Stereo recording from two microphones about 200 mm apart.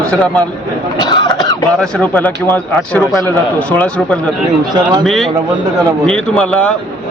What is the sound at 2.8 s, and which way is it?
Speech, centre (ahead or behind).